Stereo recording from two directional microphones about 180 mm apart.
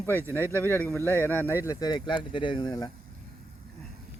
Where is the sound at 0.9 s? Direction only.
10° left (ahead or behind).